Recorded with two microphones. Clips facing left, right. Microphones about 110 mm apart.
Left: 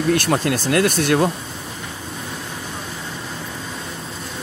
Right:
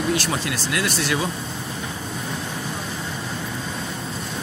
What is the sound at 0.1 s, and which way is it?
Speech, 50° left (ahead or behind).